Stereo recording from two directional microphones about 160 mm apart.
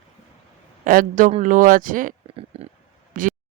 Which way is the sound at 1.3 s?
45° right (ahead or behind).